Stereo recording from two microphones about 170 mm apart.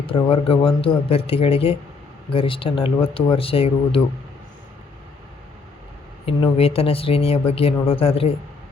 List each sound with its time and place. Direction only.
0.0 s speech: 30° left (ahead or behind)
6.2 s speech: 35° left (ahead or behind)